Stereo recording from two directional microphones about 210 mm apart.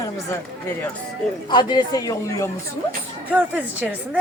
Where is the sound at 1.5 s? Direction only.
20° left (ahead or behind).